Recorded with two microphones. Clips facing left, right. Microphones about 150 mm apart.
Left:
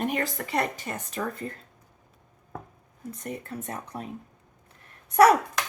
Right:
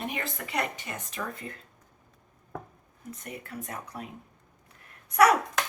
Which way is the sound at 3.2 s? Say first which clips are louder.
Left 5 dB; 30° left (ahead or behind).